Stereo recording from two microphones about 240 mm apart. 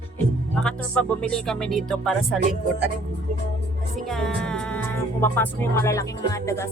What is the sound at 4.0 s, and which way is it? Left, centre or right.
Speech, centre.